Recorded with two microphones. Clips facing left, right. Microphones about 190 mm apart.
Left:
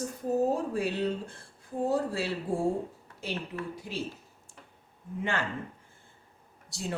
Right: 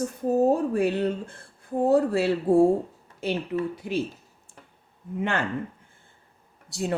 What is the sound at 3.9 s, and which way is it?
Speech, 65° right (ahead or behind).